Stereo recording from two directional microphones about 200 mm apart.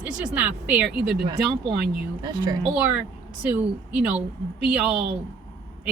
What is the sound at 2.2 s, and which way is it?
Speech, 20° right (ahead or behind).